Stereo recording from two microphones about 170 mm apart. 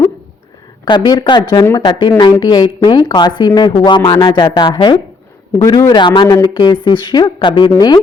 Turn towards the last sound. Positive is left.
turn(degrees=25)  # may be behind; listen again after turning